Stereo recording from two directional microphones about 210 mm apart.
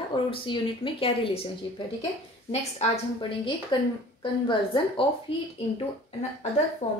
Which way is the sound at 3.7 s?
20° left (ahead or behind).